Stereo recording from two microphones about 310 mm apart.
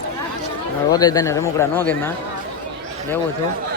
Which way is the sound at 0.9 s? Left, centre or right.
Centre.